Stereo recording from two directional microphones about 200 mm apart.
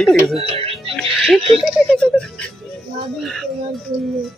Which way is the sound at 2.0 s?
5° left (ahead or behind).